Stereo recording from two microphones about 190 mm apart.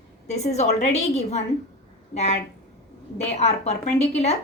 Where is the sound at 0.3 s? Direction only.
35° left (ahead or behind).